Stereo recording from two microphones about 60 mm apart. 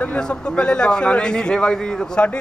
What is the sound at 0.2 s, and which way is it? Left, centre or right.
A man's voice, centre.